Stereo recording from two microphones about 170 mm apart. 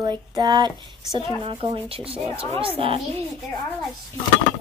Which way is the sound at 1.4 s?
30° right (ahead or behind).